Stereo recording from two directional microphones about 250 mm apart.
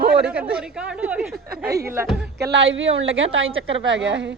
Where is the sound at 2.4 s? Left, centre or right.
Right.